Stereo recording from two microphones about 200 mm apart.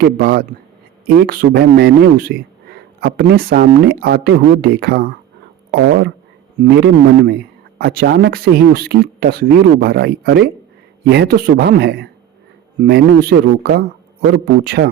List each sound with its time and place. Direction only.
0.0 s speech: 50° right (ahead or behind)
6.7 s a man's voice: 55° right (ahead or behind)